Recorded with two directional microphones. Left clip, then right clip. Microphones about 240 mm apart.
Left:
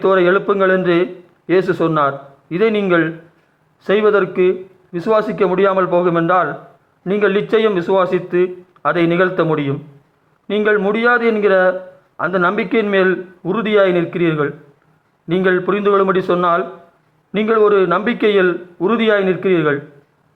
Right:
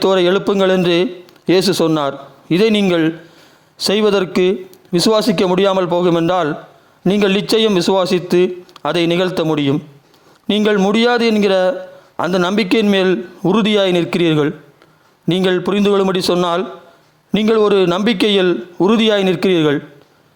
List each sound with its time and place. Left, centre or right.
0.0 s a man's voice: right